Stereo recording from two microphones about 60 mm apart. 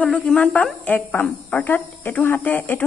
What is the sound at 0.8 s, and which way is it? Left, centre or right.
Speech, left.